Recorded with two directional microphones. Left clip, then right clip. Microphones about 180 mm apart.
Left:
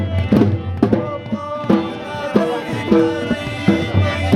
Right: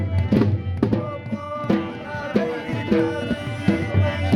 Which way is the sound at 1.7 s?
35° left (ahead or behind).